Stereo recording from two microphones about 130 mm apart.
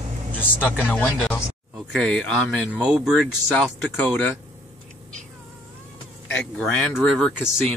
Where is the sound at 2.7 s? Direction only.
5° right (ahead or behind).